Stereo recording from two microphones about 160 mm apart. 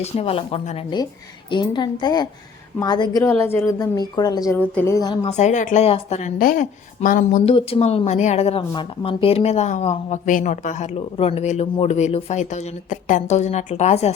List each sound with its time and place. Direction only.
0.0 s speech: 40° left (ahead or behind)
1.5 s speech: 30° left (ahead or behind)
3.2 s speech: 15° left (ahead or behind)
3.7 s speech: 25° left (ahead or behind)
4.5 s speech: 10° left (ahead or behind)
5.2 s speech: 45° left (ahead or behind)
6.4 s a woman's voice: 60° left (ahead or behind)
7.4 s speech: 35° left (ahead or behind)